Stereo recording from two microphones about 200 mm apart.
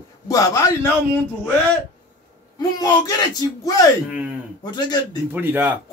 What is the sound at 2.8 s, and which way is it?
A man's voice, 20° left (ahead or behind).